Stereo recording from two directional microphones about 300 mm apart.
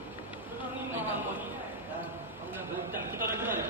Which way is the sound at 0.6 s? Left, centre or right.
Centre.